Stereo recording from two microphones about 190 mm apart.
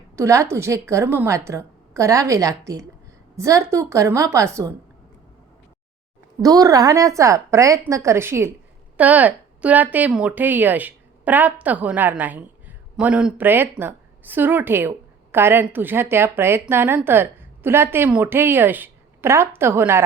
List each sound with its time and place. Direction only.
0.2 s speech: 15° right (ahead or behind)
6.4 s a woman's voice: 20° right (ahead or behind)